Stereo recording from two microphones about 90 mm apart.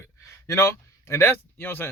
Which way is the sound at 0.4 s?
30° left (ahead or behind).